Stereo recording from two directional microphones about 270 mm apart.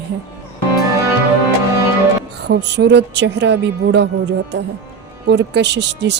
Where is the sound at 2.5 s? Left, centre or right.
Right.